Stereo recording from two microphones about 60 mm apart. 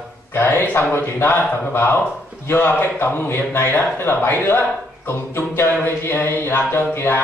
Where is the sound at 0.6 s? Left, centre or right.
Left.